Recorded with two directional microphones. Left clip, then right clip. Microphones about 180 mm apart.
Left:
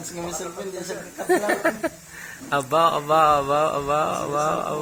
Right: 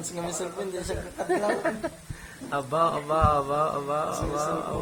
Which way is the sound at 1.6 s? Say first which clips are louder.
Left 6 dB; 30° left (ahead or behind).